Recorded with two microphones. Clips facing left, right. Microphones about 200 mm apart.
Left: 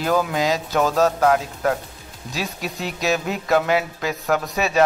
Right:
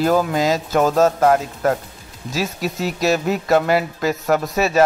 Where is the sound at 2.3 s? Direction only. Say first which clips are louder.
Right 5 dB; 40° right (ahead or behind).